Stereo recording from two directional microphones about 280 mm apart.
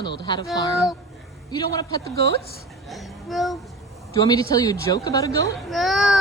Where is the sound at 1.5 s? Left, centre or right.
Centre.